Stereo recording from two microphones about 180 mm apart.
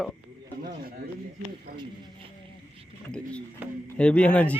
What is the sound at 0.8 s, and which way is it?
Speech, 55° right (ahead or behind).